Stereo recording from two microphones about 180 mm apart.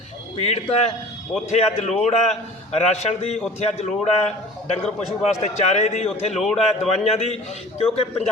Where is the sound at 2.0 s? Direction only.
40° left (ahead or behind).